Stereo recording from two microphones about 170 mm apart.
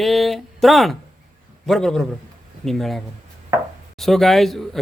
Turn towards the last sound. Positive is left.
turn(degrees=0)  # may be behind; listen again after turning